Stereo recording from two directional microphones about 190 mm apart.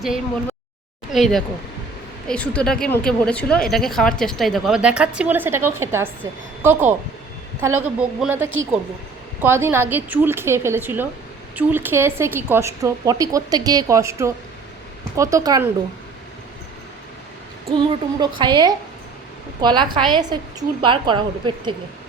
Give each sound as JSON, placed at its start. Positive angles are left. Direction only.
{"t": 1.1, "sound": "a woman's voice", "side_deg": 0}
{"t": 7.9, "sound": "a woman's voice", "side_deg": -10}
{"t": 17.7, "sound": "a woman's voice", "side_deg": -25}